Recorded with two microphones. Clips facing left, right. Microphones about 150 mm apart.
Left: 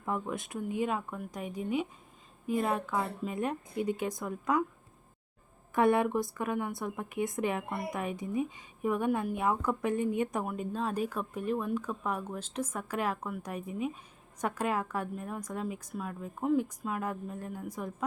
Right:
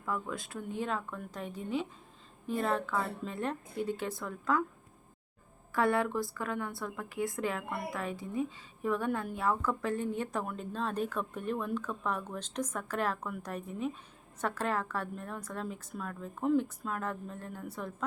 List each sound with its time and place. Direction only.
0.0 s a woman's voice: 20° left (ahead or behind)
5.7 s a woman's voice: 20° left (ahead or behind)